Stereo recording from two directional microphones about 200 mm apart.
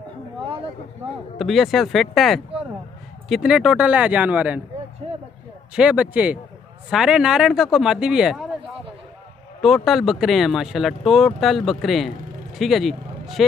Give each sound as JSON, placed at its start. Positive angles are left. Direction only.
{"t": 1.4, "sound": "speech", "side_deg": 0}
{"t": 5.0, "sound": "a sound", "side_deg": -30}
{"t": 5.8, "sound": "speech", "side_deg": -5}
{"t": 9.8, "sound": "speech", "side_deg": 0}